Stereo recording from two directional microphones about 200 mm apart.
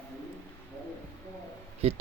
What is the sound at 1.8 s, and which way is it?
Speech, 30° right (ahead or behind).